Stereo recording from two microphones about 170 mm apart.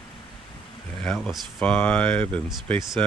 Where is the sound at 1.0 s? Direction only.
Centre (ahead or behind).